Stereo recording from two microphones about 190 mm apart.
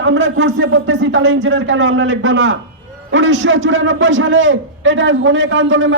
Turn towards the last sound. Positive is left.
turn(degrees=-80)